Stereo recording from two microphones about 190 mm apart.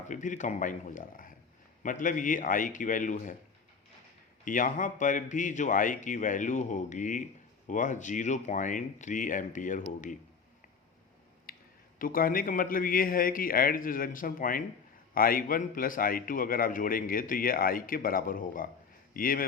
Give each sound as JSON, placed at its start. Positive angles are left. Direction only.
{"t": 0.1, "sound": "a man's voice", "side_deg": 40}
{"t": 4.4, "sound": "a man's voice", "side_deg": 45}
{"t": 11.5, "sound": "a sound", "side_deg": 50}
{"t": 11.9, "sound": "a man's voice", "side_deg": 45}